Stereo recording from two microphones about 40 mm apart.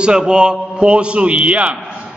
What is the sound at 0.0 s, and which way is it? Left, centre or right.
A man's voice, right.